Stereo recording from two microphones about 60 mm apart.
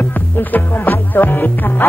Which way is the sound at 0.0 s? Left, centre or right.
Left.